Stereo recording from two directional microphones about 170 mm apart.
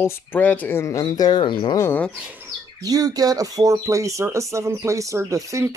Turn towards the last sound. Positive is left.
turn(degrees=-20)  # may be behind; listen again after turning